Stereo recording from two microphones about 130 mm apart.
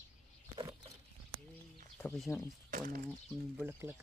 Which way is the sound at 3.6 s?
15° right (ahead or behind).